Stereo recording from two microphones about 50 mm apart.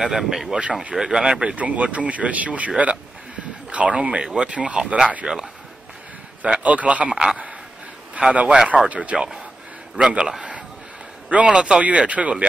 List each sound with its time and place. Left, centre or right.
0.0 s speech: centre; by 2.7 s right
3.7 s speech: right
8.2 s speech: right; by 10.4 s centre
11.2 s a man's voice: right
11.5 s speech: centre